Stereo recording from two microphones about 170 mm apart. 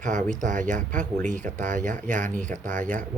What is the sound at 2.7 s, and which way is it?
Speech, 10° left (ahead or behind).